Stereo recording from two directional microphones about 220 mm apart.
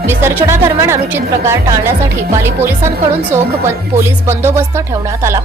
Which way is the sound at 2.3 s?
10° right (ahead or behind).